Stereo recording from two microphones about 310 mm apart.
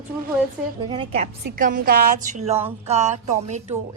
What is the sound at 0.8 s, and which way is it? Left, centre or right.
A woman's voice, centre.